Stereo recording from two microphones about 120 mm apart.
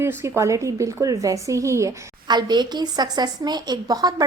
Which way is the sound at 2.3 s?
35° right (ahead or behind).